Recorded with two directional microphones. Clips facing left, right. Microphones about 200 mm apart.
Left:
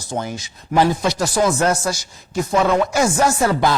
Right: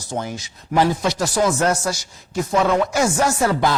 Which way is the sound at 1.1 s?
25° left (ahead or behind).